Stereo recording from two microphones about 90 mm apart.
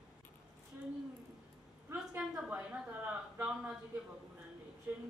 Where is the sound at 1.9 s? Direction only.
20° right (ahead or behind).